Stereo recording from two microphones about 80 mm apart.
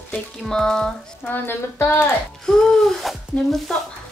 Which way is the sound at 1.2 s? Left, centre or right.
Left.